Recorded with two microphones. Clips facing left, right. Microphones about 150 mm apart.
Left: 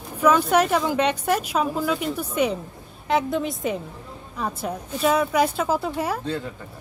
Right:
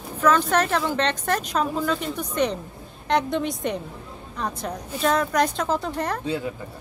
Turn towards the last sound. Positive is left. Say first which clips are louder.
# right 2 dB
turn(degrees=-10)  # may be behind; listen again after turning